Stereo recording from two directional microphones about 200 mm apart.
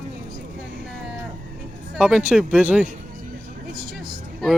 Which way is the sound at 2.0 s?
5° right (ahead or behind).